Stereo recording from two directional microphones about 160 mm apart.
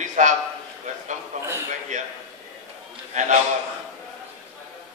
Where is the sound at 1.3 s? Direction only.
45° right (ahead or behind).